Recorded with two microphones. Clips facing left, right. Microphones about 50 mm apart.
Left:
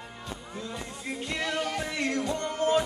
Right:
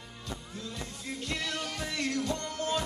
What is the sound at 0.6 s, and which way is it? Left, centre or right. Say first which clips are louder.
Music: left 3 dB; left.